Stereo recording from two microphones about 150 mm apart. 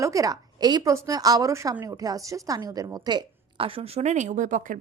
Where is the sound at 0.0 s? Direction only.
20° right (ahead or behind).